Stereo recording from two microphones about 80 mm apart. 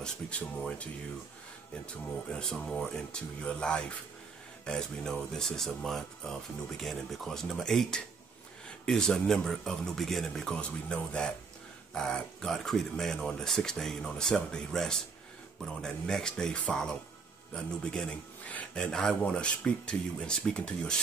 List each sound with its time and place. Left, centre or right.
0.0 s speech: centre
2.3 s speech: centre